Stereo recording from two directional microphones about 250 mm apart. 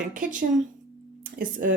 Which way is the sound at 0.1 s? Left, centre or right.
Right.